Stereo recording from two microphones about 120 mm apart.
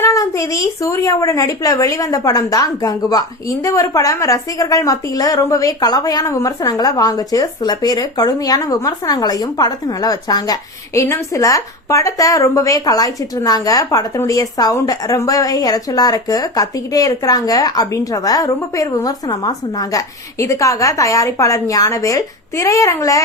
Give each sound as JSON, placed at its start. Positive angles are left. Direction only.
{"t": 0.0, "sound": "a woman's voice", "side_deg": 25}